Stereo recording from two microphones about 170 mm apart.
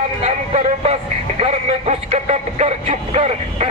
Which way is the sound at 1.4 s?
40° right (ahead or behind).